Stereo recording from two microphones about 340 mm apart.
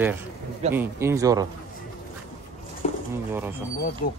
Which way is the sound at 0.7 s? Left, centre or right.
Centre.